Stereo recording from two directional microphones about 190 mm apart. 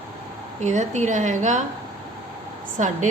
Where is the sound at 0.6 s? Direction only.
40° right (ahead or behind).